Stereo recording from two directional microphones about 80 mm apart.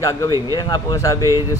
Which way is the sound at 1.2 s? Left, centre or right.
Right.